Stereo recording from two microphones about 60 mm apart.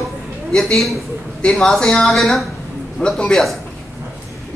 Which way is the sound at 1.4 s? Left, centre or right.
Centre.